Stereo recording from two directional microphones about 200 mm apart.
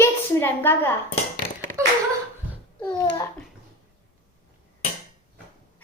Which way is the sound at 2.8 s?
15° left (ahead or behind).